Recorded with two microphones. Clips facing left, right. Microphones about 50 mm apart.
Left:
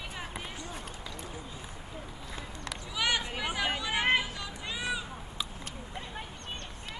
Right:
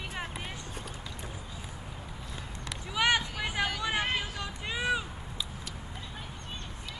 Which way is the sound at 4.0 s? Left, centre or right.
Left.